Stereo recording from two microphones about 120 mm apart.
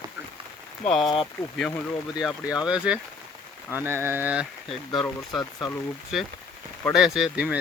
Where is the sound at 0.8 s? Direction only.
Centre (ahead or behind).